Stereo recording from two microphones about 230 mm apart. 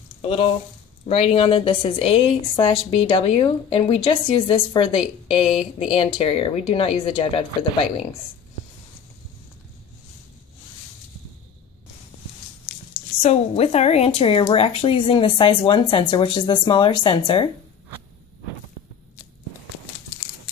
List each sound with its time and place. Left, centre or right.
0.2 s a woman's voice: left
13.2 s a woman's voice: left